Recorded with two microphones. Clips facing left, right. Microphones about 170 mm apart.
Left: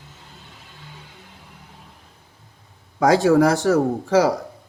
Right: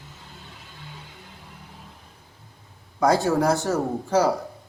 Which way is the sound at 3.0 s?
90° left.